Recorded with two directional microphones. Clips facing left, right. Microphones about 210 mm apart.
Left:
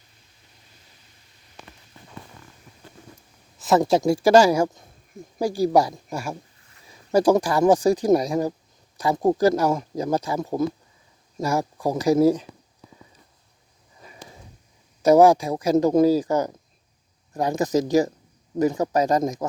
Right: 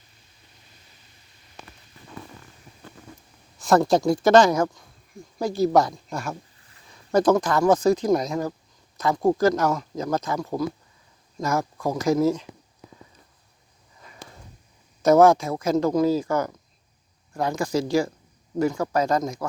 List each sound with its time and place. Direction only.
3.6 s speech: 5° left (ahead or behind)
15.0 s speech: 15° left (ahead or behind)